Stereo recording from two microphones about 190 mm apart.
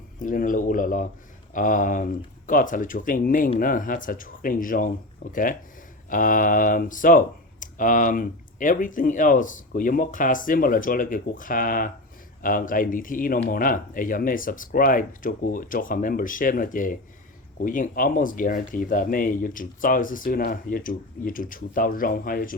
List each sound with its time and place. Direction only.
0.2 s speech: 45° left (ahead or behind)